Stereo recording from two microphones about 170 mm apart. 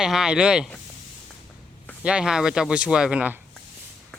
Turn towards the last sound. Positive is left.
turn(degrees=-5)  # may be behind; listen again after turning